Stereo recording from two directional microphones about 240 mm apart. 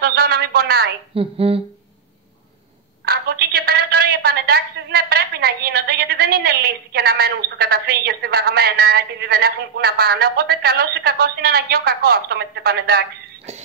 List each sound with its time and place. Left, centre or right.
0.0 s a sound: right
1.1 s speech: right
3.1 s a woman's voice: right